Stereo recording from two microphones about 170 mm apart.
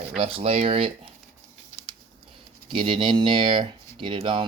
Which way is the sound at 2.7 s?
30° right (ahead or behind).